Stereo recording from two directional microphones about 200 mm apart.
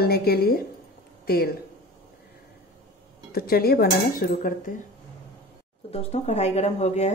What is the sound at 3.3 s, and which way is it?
A woman's voice, 50° left (ahead or behind).